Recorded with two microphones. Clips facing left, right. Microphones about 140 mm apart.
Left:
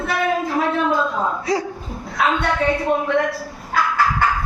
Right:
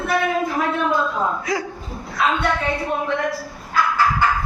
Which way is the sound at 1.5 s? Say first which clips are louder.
Left 3 dB; 35° left (ahead or behind).